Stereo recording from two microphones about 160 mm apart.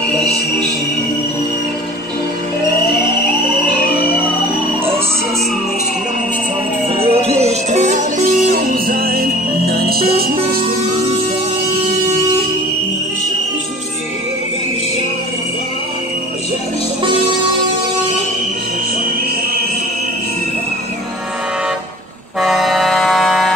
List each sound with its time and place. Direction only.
7.0 s music: 40° right (ahead or behind); by 10.6 s 70° right (ahead or behind)
22.4 s music: centre (ahead or behind)